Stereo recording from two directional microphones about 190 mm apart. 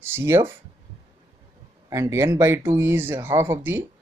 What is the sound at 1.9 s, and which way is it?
Speech, 15° right (ahead or behind).